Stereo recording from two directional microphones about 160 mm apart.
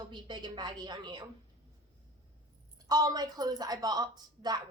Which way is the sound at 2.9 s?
25° right (ahead or behind).